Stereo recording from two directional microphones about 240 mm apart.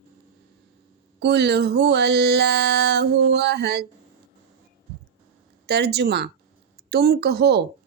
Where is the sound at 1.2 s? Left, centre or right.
Right.